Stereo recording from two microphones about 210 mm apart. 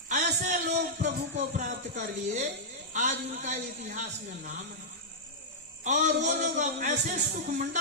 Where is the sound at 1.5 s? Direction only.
40° right (ahead or behind).